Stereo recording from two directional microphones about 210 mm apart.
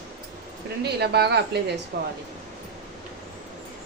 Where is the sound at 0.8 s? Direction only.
50° right (ahead or behind).